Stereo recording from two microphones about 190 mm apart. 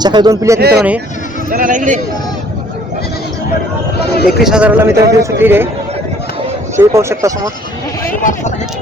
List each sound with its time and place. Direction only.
0.0 s speech: 20° right (ahead or behind)
1.5 s a man's voice: 45° right (ahead or behind)
4.0 s speech: 55° left (ahead or behind)
4.4 s speech: 5° right (ahead or behind)
6.7 s speech: 15° right (ahead or behind)
8.2 s speech: 40° left (ahead or behind)